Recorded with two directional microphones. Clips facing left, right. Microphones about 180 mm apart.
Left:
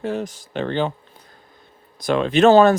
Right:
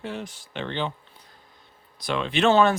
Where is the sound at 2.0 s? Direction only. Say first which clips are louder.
Left 8 dB; 45° left (ahead or behind).